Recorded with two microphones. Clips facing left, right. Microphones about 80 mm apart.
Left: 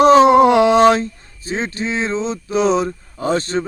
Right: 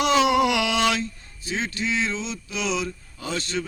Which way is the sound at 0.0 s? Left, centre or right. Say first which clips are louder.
Left 10 dB; left.